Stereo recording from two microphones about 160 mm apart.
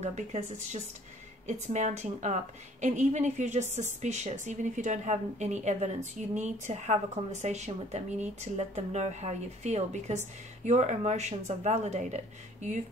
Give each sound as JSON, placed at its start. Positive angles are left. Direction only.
{"t": 0.0, "sound": "speech", "side_deg": -45}